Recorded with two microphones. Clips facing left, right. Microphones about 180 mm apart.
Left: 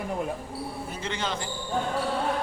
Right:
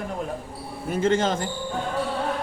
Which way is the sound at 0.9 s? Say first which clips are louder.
Right 13 dB; 45° right (ahead or behind).